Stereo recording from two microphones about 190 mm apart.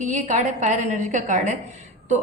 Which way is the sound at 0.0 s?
40° right (ahead or behind).